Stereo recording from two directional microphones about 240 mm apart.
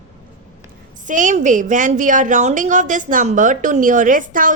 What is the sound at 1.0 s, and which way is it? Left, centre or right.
A woman's voice, right.